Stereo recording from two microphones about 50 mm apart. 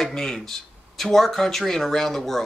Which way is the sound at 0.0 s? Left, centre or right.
Centre.